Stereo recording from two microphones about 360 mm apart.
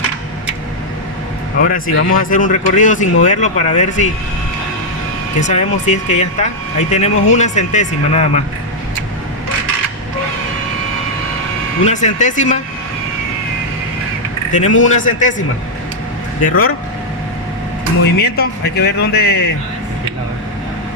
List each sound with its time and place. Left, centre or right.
1.6 s speech: left
5.4 s speech: centre
11.9 s speech: centre
14.8 s speech: left
16.4 s speech: left
18.0 s speech: left